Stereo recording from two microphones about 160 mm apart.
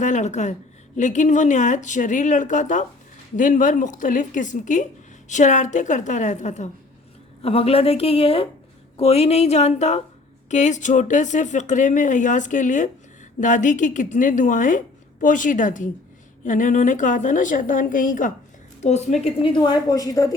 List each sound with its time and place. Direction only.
0.0 s a woman's voice: 50° left (ahead or behind)
7.4 s a woman's voice: 40° left (ahead or behind); by 18.3 s 55° left (ahead or behind)
18.8 s a woman's voice: 45° left (ahead or behind)
19.4 s a woman's voice: 30° left (ahead or behind)